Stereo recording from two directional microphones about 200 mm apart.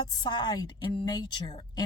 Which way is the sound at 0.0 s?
20° left (ahead or behind).